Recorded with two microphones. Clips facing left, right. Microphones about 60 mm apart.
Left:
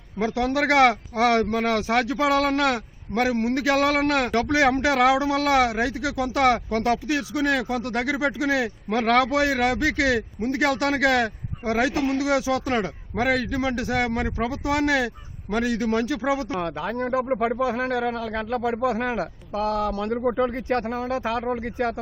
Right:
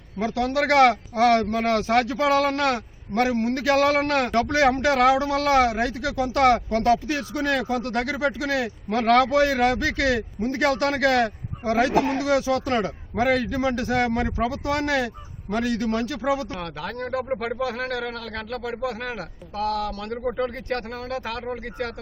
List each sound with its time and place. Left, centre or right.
0.2 s a man's voice: left
11.9 s speech: right
12.2 s a man's voice: centre
20.1 s speech: centre